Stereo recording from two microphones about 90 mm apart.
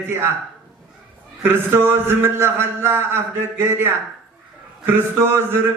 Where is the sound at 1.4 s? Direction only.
25° right (ahead or behind).